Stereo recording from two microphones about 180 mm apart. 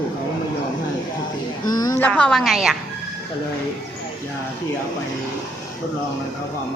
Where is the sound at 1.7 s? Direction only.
20° left (ahead or behind).